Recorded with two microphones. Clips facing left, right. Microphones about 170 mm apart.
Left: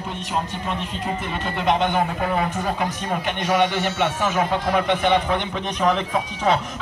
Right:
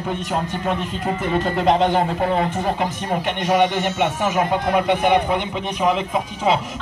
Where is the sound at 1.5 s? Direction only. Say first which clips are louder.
Right 3 dB; 40° right (ahead or behind).